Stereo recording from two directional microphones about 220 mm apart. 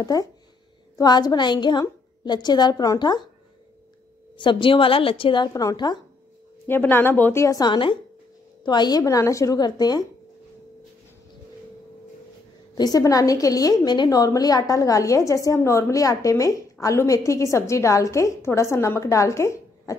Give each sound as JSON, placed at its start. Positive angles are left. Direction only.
{"t": 0.0, "sound": "a woman's voice", "side_deg": 15}
{"t": 4.4, "sound": "a woman's voice", "side_deg": 20}
{"t": 12.7, "sound": "a woman's voice", "side_deg": 15}